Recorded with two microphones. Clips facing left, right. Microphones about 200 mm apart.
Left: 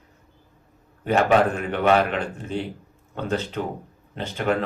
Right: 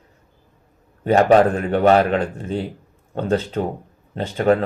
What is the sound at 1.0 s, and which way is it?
A man's voice, 35° right (ahead or behind).